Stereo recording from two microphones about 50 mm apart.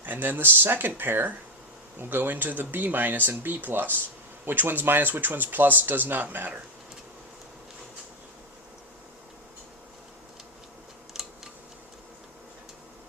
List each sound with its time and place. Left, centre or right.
0.0 s speech: right
11.1 s scissors: centre